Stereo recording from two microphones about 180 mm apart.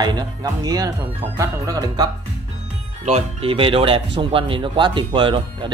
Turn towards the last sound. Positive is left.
turn(degrees=-30)  # may be behind; listen again after turning